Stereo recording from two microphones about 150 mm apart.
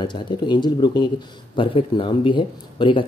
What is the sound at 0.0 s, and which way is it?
Speech, 30° left (ahead or behind).